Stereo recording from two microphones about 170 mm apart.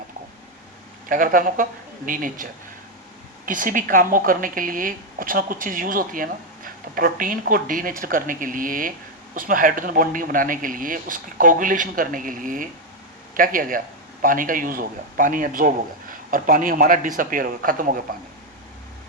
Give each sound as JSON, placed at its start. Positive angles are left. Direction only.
{"t": 1.0, "sound": "speech", "side_deg": -55}